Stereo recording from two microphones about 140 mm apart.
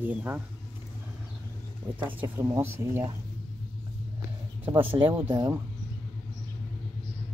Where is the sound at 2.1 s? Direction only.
15° right (ahead or behind).